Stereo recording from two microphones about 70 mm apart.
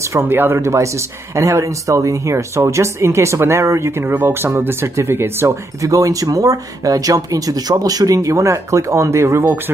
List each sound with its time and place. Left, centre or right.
0.2 s speech: right
5.8 s speech: right